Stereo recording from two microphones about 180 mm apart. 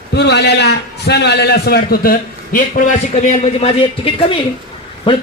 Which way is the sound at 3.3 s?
35° left (ahead or behind).